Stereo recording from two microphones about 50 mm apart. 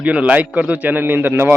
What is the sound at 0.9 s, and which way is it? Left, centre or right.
Speech, right.